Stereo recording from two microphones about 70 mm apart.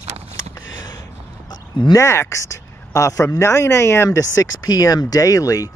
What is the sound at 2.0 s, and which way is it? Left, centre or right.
Speech, left.